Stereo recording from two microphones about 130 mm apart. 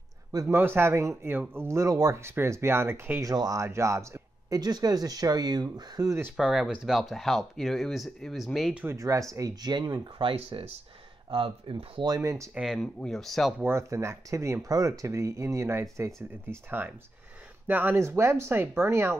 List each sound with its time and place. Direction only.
0.3 s speech: 25° right (ahead or behind)
0.6 s speech: 15° right (ahead or behind)
6.3 s speech: 5° right (ahead or behind)
8.8 s speech: 25° right (ahead or behind)
12.2 s speech: 25° right (ahead or behind)
12.5 s speech: centre (ahead or behind)
13.6 s speech: 20° right (ahead or behind)